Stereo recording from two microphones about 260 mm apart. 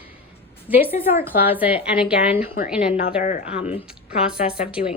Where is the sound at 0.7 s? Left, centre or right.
Centre.